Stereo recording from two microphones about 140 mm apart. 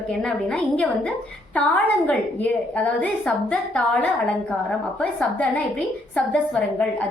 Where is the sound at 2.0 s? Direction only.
10° left (ahead or behind).